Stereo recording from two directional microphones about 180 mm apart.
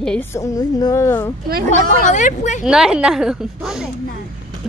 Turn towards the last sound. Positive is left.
turn(degrees=0)  # may be behind; listen again after turning